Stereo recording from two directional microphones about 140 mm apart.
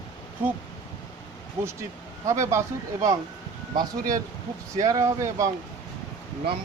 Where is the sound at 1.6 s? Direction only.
20° right (ahead or behind).